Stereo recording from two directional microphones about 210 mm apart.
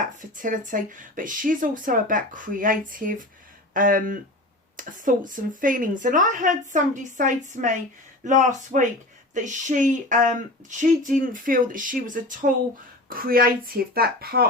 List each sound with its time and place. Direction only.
0.0 s a woman's voice: 40° right (ahead or behind)